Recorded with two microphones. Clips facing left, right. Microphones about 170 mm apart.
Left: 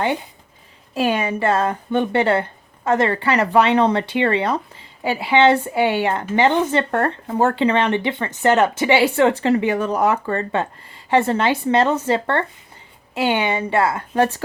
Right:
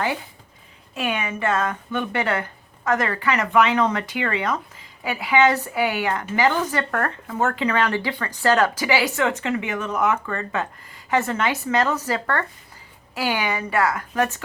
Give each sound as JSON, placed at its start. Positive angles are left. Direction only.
{"t": 0.9, "sound": "speech", "side_deg": 35}